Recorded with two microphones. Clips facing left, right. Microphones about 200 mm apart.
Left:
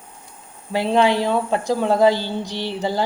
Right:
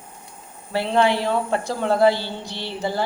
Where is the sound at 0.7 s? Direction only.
15° left (ahead or behind).